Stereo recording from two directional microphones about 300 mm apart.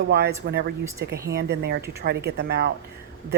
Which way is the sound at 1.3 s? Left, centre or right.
Right.